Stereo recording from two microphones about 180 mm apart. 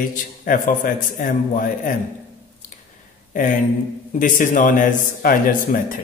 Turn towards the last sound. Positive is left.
turn(degrees=50)  # may be behind; listen again after turning